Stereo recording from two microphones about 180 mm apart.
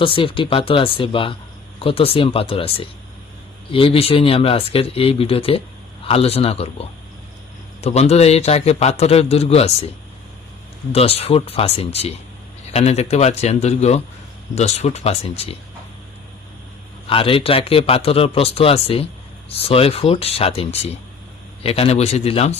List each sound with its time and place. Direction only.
0.0 s speech: 30° left (ahead or behind)
10.9 s speech: 35° left (ahead or behind)
17.1 s speech: 30° left (ahead or behind)